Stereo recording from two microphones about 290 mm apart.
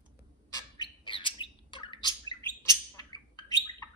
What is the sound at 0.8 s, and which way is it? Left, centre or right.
Bird, centre.